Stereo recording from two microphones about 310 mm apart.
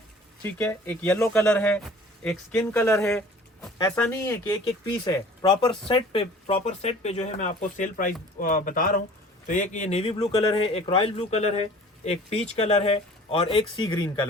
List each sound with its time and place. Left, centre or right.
0.6 s speech: centre